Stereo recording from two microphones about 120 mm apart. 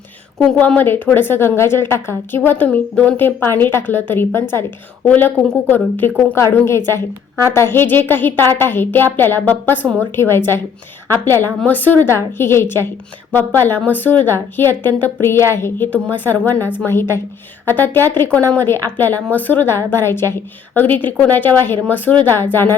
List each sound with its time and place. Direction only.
0.3 s a woman's voice: 10° left (ahead or behind)